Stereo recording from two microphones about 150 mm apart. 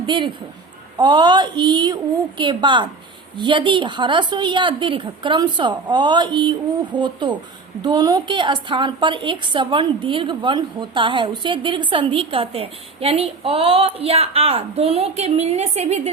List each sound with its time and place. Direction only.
0.0 s a woman's voice: 35° right (ahead or behind)